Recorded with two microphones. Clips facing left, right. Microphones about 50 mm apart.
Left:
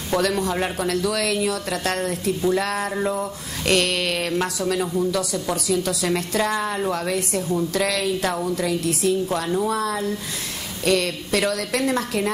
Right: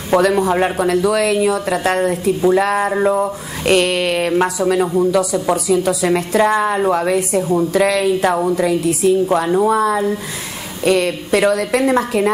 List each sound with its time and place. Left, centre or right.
0.2 s music: centre